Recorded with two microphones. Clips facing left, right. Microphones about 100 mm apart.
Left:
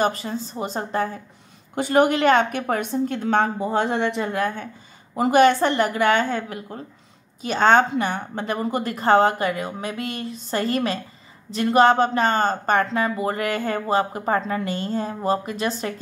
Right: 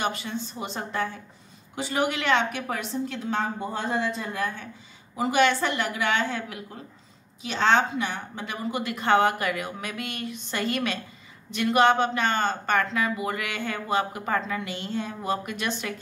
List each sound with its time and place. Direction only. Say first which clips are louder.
0.0 s speech: left 6 dB; 40° left (ahead or behind)
1.8 s a woman's voice: left 9 dB; 50° left (ahead or behind); by 15.9 s 35° left (ahead or behind)